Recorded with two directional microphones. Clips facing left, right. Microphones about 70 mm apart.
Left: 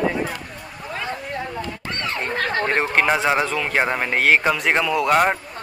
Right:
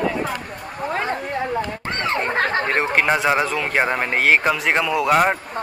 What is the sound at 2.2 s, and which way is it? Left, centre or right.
Speech, right.